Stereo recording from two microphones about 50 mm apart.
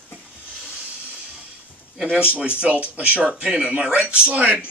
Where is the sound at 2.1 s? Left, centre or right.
Right.